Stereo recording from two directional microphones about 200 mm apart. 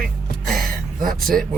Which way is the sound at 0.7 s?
45° right (ahead or behind).